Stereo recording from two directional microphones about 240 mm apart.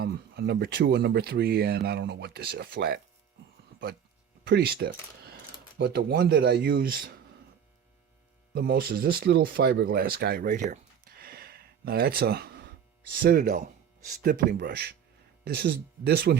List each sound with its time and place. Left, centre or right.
0.0 s speech: right
4.4 s speech: right
8.5 s speech: right
11.2 s gasp: right
13.2 s speech: right